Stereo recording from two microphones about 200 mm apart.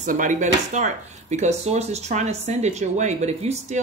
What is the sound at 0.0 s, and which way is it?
Speech, 40° right (ahead or behind).